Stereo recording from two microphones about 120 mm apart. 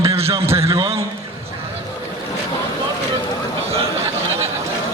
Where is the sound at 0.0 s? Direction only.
55° right (ahead or behind).